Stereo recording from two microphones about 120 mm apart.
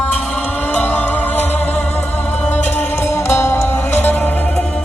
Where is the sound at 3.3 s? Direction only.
20° left (ahead or behind).